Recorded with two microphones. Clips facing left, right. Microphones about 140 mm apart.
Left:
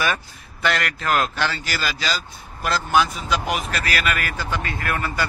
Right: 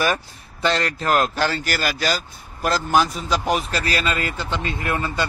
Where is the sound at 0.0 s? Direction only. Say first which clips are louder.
Right 2 dB; 35° right (ahead or behind).